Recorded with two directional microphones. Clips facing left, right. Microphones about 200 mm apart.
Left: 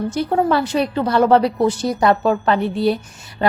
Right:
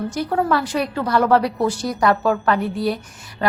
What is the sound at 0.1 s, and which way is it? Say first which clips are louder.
A woman's voice: left 3 dB; 25° left (ahead or behind).